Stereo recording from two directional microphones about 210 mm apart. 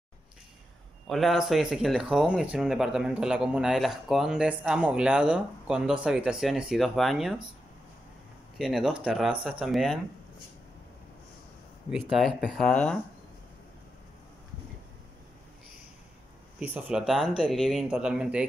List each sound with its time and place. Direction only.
1.0 s speech: centre (ahead or behind)
8.5 s speech: centre (ahead or behind)
11.9 s speech: centre (ahead or behind)
16.5 s speech: 5° right (ahead or behind)